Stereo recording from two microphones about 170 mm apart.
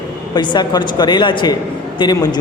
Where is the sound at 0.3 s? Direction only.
25° left (ahead or behind).